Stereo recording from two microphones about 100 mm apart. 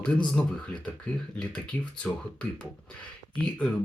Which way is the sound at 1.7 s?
20° left (ahead or behind).